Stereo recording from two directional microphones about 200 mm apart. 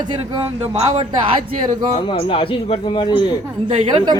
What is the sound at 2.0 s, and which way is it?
A man's voice, 25° left (ahead or behind).